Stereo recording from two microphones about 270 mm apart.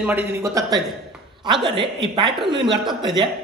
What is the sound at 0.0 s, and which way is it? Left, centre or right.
Speech, centre.